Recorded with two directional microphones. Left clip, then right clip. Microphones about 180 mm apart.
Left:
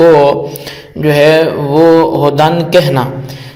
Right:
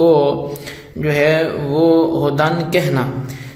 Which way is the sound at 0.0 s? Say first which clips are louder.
Left 7 dB; 25° left (ahead or behind).